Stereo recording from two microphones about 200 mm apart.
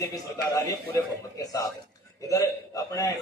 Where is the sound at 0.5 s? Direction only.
15° left (ahead or behind).